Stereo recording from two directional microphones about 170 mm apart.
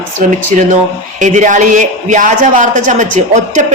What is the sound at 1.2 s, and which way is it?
A woman's voice, 45° right (ahead or behind).